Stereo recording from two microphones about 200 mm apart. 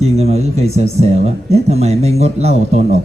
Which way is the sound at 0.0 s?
30° right (ahead or behind).